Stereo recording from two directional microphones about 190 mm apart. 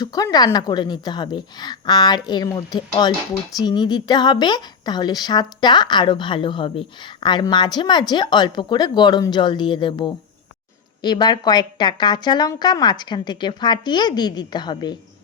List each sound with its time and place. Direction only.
0.0 s a woman's voice: 20° left (ahead or behind)